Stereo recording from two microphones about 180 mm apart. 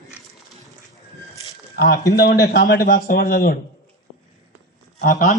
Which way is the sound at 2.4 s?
70° left (ahead or behind).